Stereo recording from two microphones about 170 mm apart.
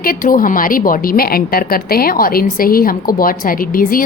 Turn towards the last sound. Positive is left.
turn(degrees=55)  # may be behind; listen again after turning